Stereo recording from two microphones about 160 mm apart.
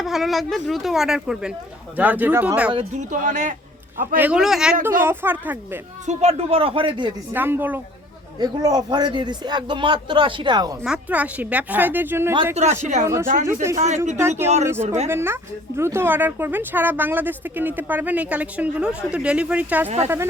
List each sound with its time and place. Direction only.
0.0 s speech: centre (ahead or behind)
2.7 s a man's voice: 50° right (ahead or behind)
4.2 s speech: 5° right (ahead or behind)
6.1 s speech: 40° right (ahead or behind)
7.3 s speech: 10° right (ahead or behind)
8.4 s a man's voice: 25° right (ahead or behind)
10.8 s speech: 10° right (ahead or behind)
12.5 s a man's voice: 45° right (ahead or behind)
13.5 s speech: 15° right (ahead or behind)
13.7 s a man's voice: 50° right (ahead or behind)
14.2 s speech: 15° right (ahead or behind)